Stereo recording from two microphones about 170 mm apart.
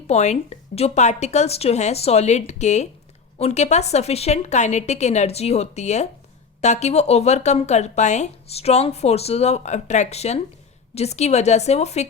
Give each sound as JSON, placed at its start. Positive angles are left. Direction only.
{"t": 0.1, "sound": "speech", "side_deg": 40}